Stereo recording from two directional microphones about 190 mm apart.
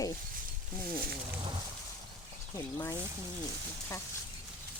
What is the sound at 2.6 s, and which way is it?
Speech, 15° left (ahead or behind).